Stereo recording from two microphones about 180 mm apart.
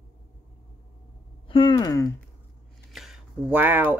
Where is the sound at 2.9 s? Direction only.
Centre (ahead or behind).